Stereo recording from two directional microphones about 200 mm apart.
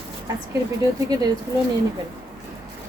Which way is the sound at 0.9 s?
20° right (ahead or behind).